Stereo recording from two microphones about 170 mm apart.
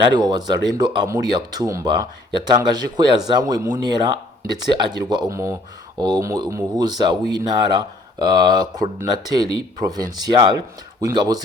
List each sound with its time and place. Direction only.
0.1 s speech: 25° right (ahead or behind)